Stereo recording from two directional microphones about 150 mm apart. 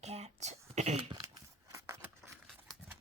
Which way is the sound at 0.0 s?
45° right (ahead or behind).